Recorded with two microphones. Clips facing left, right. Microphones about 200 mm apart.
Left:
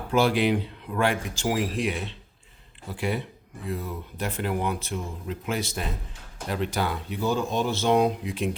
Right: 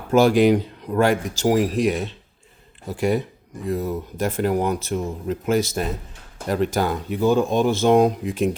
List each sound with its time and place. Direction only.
0.1 s speech: 45° right (ahead or behind)